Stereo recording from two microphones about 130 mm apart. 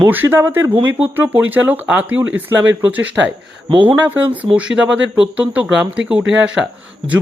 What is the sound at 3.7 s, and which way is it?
Speech, 40° right (ahead or behind).